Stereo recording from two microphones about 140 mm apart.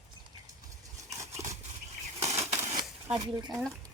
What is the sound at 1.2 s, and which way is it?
Horse, 20° right (ahead or behind).